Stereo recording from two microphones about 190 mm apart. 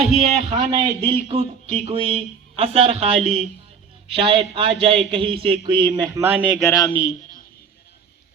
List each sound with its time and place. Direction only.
0.6 s a man's voice: 25° right (ahead or behind)
1.4 s a man's voice: 35° right (ahead or behind); by 6.6 s 10° right (ahead or behind)
6.7 s speech: 20° left (ahead or behind)